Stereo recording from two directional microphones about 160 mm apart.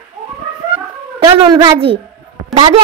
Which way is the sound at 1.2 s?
25° right (ahead or behind).